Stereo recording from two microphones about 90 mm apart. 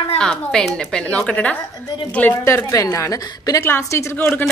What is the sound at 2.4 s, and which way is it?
A woman's voice, 35° left (ahead or behind).